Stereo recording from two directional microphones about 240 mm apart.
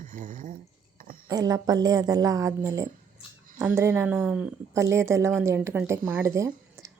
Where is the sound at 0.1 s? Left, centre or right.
Right.